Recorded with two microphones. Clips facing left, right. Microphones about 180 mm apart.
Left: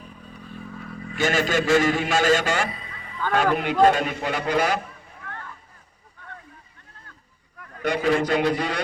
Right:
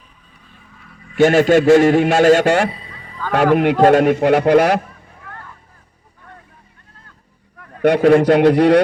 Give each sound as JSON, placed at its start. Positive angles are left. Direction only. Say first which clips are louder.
{"t": 0.4, "sound": "vehicle", "louder": "left 10 dB", "side_deg": 45}
{"t": 1.1, "sound": "a man's voice", "louder": "right 11 dB", "side_deg": -60}
{"t": 2.6, "sound": "a sound", "louder": "right 7 dB", "side_deg": -30}
{"t": 3.3, "sound": "a man's voice", "louder": "right 7 dB", "side_deg": -70}
{"t": 7.8, "sound": "a man's voice", "louder": "right 10 dB", "side_deg": -70}